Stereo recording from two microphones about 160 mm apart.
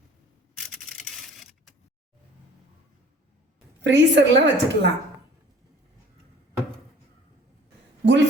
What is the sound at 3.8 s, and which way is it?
Speech, 90° right.